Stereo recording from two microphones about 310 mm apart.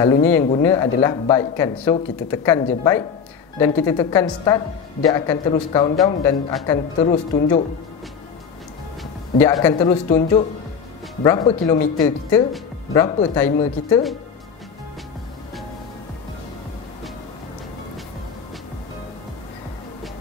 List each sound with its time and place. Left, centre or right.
0.0 s speech: centre
9.4 s speech: centre
11.7 s speech: left
12.3 s speech: centre